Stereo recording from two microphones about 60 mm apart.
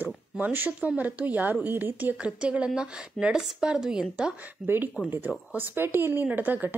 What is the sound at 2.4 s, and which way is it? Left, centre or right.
Speech, centre.